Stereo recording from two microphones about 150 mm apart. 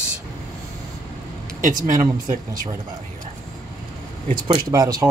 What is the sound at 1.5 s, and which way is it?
Speech, 60° right (ahead or behind).